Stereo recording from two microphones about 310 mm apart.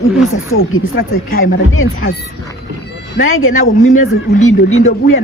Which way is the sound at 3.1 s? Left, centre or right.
Left.